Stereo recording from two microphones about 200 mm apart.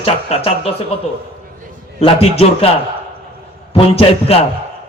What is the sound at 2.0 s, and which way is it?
Speech, 30° left (ahead or behind).